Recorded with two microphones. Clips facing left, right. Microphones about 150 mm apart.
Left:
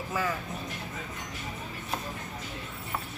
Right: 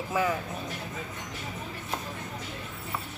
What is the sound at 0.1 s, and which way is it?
Speech, 15° right (ahead or behind).